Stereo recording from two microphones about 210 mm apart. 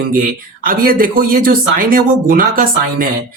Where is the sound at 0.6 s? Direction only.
45° right (ahead or behind).